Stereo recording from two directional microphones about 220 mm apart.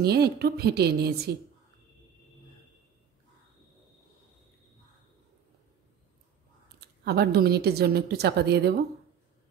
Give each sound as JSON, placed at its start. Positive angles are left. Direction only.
{"t": 0.0, "sound": "a woman's voice", "side_deg": -45}
{"t": 7.1, "sound": "a woman's voice", "side_deg": -45}